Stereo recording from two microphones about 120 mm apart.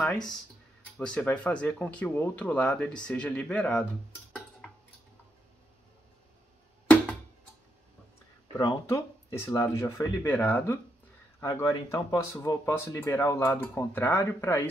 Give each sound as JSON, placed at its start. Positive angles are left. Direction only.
{"t": 0.0, "sound": "speech", "side_deg": 5}
{"t": 8.8, "sound": "speech", "side_deg": 20}